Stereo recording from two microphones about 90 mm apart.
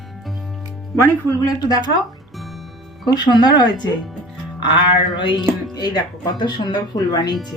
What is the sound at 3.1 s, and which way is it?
Speech, 55° left (ahead or behind).